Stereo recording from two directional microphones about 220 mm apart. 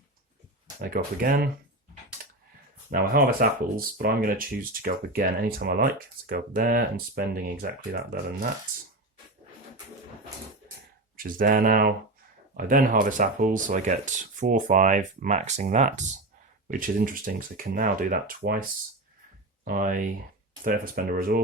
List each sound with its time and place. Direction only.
0.8 s speech: 40° right (ahead or behind)
2.2 s computer keyboard: 40° right (ahead or behind)
2.9 s speech: 40° right (ahead or behind)
11.2 s speech: 40° right (ahead or behind)
19.6 s speech: 40° right (ahead or behind)